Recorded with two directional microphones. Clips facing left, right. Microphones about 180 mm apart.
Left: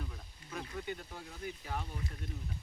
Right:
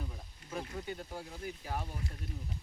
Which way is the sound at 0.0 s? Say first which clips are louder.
Right 1 dB; 15° right (ahead or behind).